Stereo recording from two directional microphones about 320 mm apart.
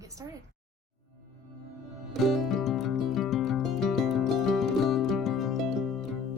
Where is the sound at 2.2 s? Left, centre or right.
Centre.